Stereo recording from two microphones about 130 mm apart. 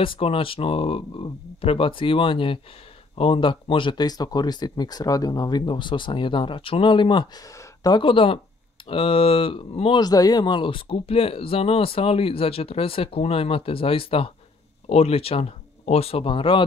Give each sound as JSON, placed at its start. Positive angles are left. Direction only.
{"t": 0.0, "sound": "speech", "side_deg": 45}
{"t": 7.5, "sound": "a sound", "side_deg": 30}
{"t": 8.0, "sound": "speech", "side_deg": 45}